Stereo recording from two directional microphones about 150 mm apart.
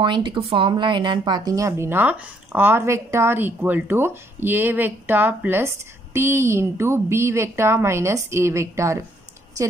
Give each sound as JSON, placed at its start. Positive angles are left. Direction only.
{"t": 0.0, "sound": "speech", "side_deg": -30}